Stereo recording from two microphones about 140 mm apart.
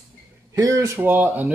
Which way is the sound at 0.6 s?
20° right (ahead or behind).